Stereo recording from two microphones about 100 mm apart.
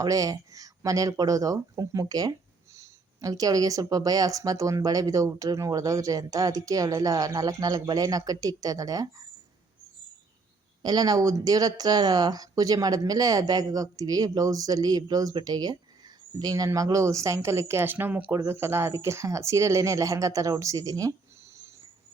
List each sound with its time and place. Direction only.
0.0 s speech: 35° right (ahead or behind)
10.8 s speech: 40° right (ahead or behind)